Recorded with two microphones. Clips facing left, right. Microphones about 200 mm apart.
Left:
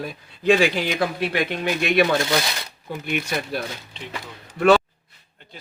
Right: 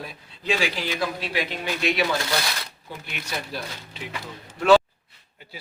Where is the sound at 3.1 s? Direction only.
55° left (ahead or behind).